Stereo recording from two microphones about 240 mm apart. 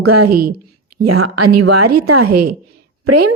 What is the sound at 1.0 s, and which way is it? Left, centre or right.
A woman's voice, right.